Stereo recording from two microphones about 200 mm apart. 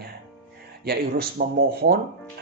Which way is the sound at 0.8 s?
50° right (ahead or behind).